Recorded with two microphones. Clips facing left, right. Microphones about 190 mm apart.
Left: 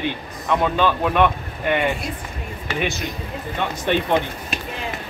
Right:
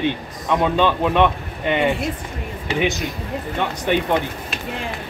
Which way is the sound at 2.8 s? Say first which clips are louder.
Right 3 dB; 15° right (ahead or behind).